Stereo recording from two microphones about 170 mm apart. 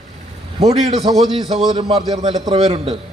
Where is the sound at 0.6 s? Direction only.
35° right (ahead or behind).